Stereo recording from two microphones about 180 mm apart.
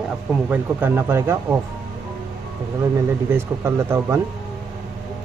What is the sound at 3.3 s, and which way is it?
Speech, 15° right (ahead or behind).